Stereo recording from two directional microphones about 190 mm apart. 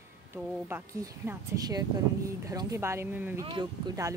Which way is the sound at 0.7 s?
15° right (ahead or behind).